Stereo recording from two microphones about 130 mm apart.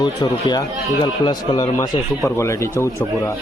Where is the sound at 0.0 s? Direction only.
30° left (ahead or behind).